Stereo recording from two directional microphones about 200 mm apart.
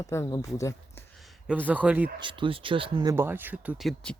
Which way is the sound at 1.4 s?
10° right (ahead or behind).